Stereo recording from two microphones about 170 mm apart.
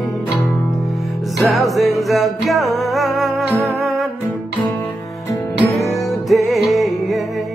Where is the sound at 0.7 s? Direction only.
Centre (ahead or behind).